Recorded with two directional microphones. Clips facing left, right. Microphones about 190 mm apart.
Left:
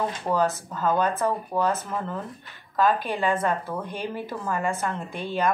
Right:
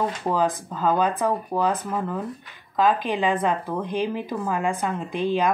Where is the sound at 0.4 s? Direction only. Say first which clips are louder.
Right 1 dB; 15° right (ahead or behind).